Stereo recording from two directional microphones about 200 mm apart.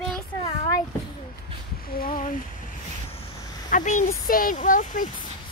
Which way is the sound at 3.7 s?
35° left (ahead or behind).